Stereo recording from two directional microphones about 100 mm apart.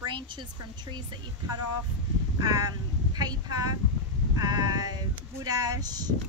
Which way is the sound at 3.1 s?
40° right (ahead or behind).